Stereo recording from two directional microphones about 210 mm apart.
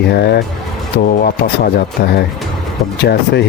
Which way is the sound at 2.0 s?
50° left (ahead or behind).